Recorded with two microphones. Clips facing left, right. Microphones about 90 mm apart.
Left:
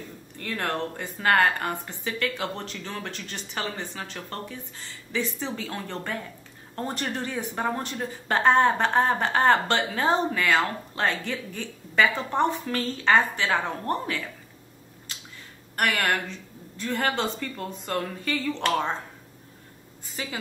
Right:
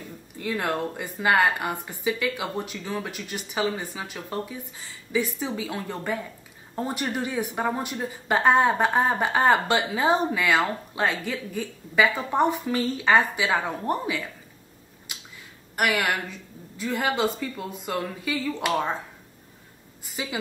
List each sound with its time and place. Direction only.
0.4 s a woman's voice: 10° right (ahead or behind)
15.1 s a sound: 15° right (ahead or behind)
15.7 s a woman's voice: 5° right (ahead or behind)
20.2 s a woman's voice: 10° right (ahead or behind)